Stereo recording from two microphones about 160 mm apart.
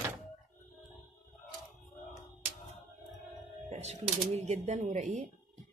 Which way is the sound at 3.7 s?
45° right (ahead or behind).